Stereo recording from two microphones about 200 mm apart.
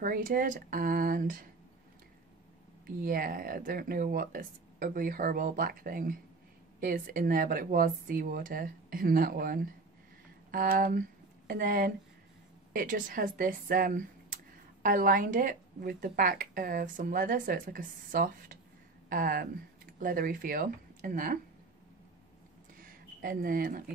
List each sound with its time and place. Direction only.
0.0 s speech: 45° right (ahead or behind)
3.0 s speech: 45° right (ahead or behind)
22.8 s a sound: 45° right (ahead or behind)